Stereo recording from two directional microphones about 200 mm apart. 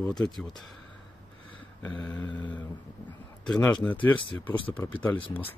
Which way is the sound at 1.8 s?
5° left (ahead or behind).